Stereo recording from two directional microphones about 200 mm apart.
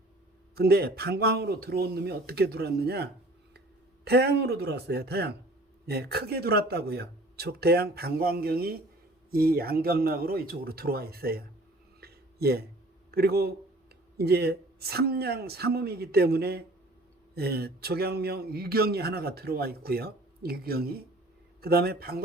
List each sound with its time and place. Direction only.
0.5 s a man's voice: 50° right (ahead or behind)
11.9 s a sound: 50° right (ahead or behind)
13.1 s a man's voice: 50° right (ahead or behind)